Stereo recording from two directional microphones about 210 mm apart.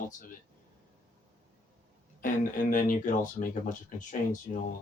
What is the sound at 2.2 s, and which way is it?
Speech, 40° left (ahead or behind).